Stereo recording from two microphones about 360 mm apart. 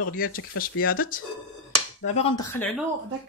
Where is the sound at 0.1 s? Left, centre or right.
Left.